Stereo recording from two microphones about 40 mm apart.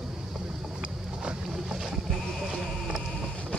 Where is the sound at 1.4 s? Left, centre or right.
Centre.